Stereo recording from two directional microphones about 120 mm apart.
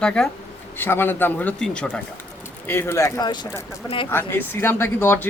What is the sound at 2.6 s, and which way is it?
Speech, 20° left (ahead or behind).